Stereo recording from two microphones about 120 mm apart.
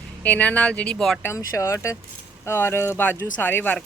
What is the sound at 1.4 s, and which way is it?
Speech, 25° left (ahead or behind).